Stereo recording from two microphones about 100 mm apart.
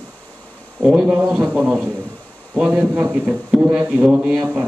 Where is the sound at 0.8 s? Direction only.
5° right (ahead or behind).